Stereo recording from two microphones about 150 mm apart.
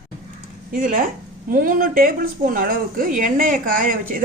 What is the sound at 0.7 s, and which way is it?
A woman's voice, 65° right (ahead or behind).